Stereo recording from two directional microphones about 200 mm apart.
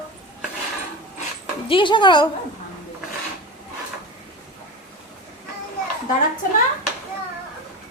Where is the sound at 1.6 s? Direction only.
25° left (ahead or behind).